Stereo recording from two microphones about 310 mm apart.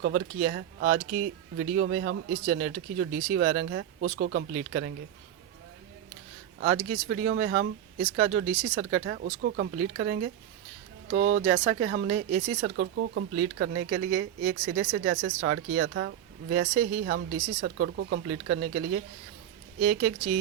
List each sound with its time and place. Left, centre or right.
0.0 s speech: right
6.6 s speech: right
19.8 s speech: right